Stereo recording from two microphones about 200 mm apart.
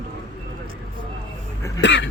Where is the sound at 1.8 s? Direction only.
60° left (ahead or behind).